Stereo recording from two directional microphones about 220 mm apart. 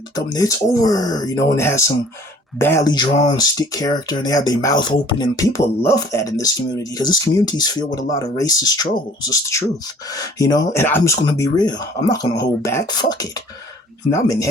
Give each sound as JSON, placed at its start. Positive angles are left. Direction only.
{"t": 0.2, "sound": "speech", "side_deg": 15}